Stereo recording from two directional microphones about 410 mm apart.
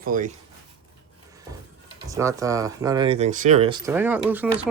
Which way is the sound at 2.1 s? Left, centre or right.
Centre.